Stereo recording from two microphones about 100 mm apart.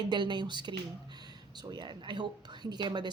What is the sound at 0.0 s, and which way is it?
A woman's voice, 50° right (ahead or behind).